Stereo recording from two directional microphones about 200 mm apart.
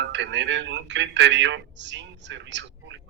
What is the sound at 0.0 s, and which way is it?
A man's voice, 60° right (ahead or behind).